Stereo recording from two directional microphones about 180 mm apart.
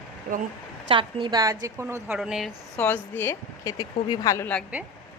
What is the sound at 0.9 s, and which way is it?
A woman's voice, 30° right (ahead or behind).